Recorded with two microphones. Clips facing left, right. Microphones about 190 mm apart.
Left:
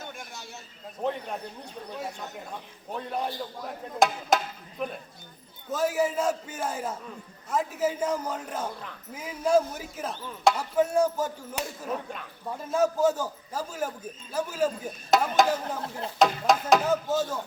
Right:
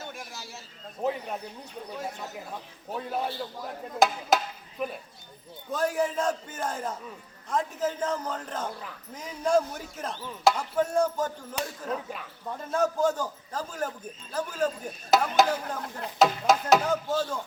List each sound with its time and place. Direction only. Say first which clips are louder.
0.0 s a sound: right 1 dB; centre (ahead or behind)
1.0 s a man's voice: right 1 dB; 5° right (ahead or behind)
11.9 s a man's voice: even; 5° right (ahead or behind)